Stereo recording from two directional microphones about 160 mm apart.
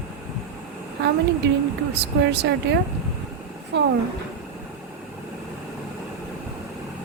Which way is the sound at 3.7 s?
90° right.